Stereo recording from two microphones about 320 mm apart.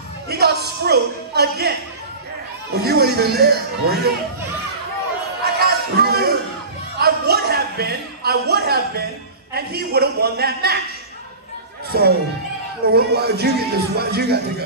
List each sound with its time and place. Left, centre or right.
0.3 s speech: right
5.4 s a sound: right
9.5 s a man's voice: right
12.8 s a man's voice: right